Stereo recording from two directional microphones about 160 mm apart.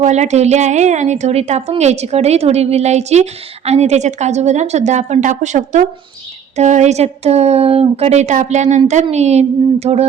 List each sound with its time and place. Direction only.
0.0 s a woman's voice: 45° right (ahead or behind)